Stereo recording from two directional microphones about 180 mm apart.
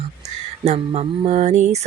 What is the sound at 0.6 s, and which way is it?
Speech, 35° right (ahead or behind).